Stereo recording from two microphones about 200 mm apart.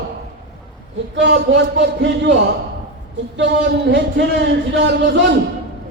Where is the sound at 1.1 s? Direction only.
65° right (ahead or behind).